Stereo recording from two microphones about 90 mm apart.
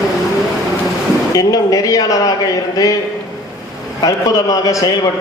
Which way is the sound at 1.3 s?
40° left (ahead or behind).